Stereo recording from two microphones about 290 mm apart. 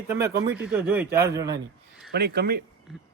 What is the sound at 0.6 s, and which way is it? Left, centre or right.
Speech, centre.